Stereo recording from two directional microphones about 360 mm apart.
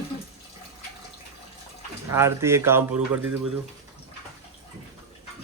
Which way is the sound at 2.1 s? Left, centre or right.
Centre.